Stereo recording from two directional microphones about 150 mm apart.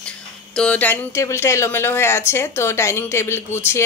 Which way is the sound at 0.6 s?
10° left (ahead or behind).